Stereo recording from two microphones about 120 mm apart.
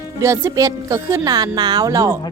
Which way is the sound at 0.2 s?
25° right (ahead or behind).